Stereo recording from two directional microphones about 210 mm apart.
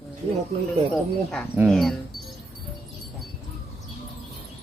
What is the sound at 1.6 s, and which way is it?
Speech, centre (ahead or behind).